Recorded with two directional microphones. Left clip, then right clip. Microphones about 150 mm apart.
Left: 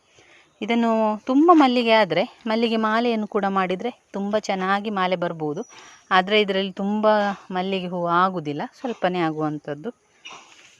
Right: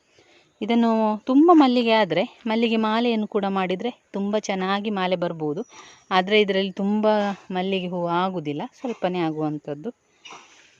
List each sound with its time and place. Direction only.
0.6 s speech: 35° right (ahead or behind)